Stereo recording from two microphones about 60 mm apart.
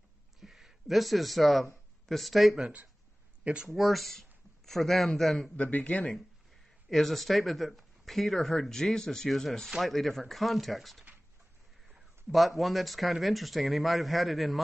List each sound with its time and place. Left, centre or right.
0.4 s speech: centre
5.6 s speech: left
5.9 s speech: centre